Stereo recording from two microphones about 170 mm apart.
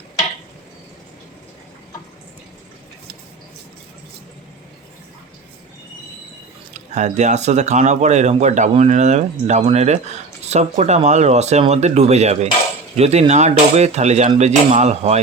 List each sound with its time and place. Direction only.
6.7 s speech: 45° right (ahead or behind)